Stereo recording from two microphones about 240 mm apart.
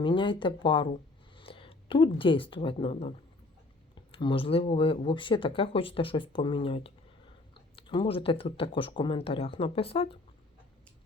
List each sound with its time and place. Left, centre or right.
0.0 s speech: centre